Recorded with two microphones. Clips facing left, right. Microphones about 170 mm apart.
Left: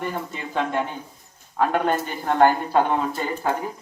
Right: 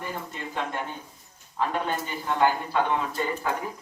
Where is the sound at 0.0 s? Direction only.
65° left (ahead or behind).